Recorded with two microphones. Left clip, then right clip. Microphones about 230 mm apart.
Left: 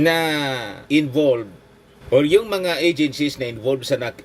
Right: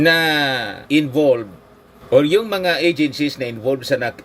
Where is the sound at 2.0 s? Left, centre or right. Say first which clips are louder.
Right 1 dB; centre.